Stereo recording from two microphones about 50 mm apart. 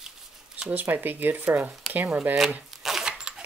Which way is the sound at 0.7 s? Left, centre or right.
Right.